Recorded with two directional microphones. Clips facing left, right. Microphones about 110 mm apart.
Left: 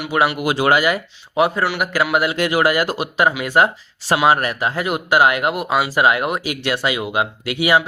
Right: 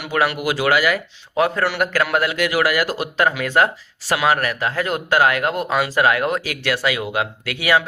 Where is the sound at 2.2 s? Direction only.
25° left (ahead or behind).